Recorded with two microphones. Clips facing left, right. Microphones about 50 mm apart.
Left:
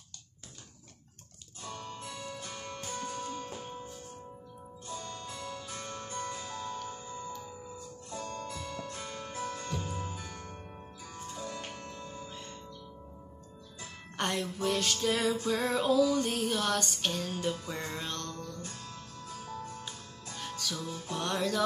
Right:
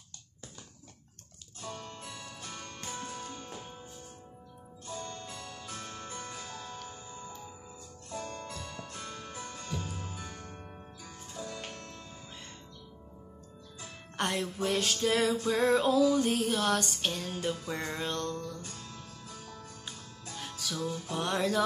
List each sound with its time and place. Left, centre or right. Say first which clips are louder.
1.6 s guitar: left 1 dB; centre
2.9 s music: left 2 dB; centre
3.2 s music: left 4 dB; centre
4.9 s music: even; centre
5.3 s music: left 2 dB; centre
6.0 s music: left 4 dB; centre
8.9 s music: left 2 dB; centre
12.3 s music: left 3 dB; centre
13.7 s music: right 1 dB; centre